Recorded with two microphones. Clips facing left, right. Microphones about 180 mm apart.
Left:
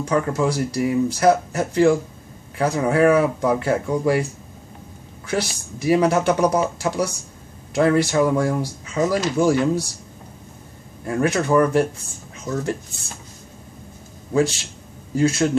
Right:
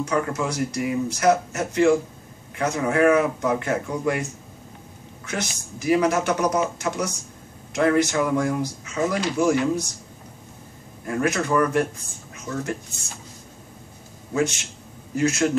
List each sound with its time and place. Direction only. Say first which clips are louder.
0.0 s speech: left 4 dB; 35° left (ahead or behind)
5.2 s speech: left 6 dB; 30° left (ahead or behind)
11.1 s speech: left 3 dB; 30° left (ahead or behind)
14.3 s speech: left 4 dB; 35° left (ahead or behind)